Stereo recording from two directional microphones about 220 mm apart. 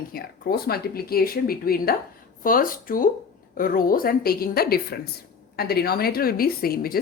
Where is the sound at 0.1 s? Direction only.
45° left (ahead or behind).